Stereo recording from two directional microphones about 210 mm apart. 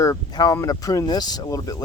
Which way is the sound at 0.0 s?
15° left (ahead or behind).